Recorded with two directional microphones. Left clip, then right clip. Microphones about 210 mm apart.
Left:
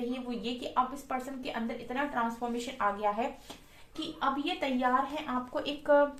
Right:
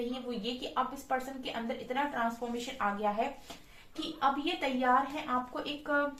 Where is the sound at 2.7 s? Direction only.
50° left (ahead or behind).